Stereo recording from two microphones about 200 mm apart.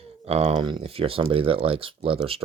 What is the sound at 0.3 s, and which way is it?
Speech, 30° right (ahead or behind).